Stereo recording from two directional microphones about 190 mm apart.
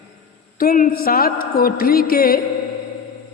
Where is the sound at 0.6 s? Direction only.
50° left (ahead or behind).